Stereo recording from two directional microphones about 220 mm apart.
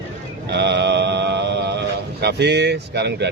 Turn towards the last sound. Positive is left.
turn(degrees=-50)  # may be behind; listen again after turning